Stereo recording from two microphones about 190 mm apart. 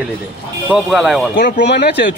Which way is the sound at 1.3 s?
60° left (ahead or behind).